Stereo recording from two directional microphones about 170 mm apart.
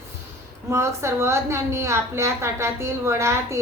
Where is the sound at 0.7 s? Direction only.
15° right (ahead or behind).